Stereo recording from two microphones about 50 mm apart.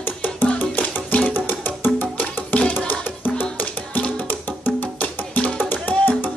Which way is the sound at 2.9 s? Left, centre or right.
Left.